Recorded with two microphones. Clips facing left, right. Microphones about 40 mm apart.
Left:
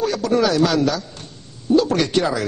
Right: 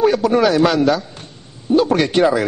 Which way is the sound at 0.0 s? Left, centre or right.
Right.